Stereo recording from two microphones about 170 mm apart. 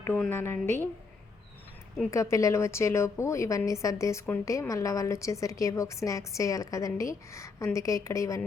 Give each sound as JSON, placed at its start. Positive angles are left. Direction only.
{"t": 0.0, "sound": "a woman's voice", "side_deg": 10}
{"t": 2.0, "sound": "a woman's voice", "side_deg": 20}